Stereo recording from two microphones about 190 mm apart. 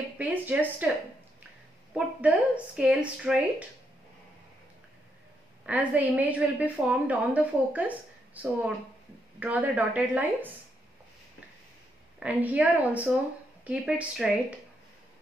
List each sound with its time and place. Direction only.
0.2 s speech: 10° right (ahead or behind)
2.0 s speech: 5° right (ahead or behind)
5.7 s a woman's voice: 10° right (ahead or behind)
9.4 s a woman's voice: 10° right (ahead or behind)
12.2 s a woman's voice: 10° right (ahead or behind)